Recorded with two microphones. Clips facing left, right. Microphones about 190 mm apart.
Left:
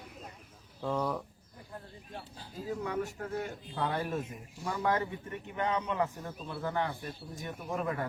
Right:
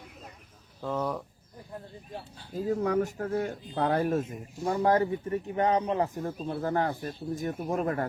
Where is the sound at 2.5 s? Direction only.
45° right (ahead or behind).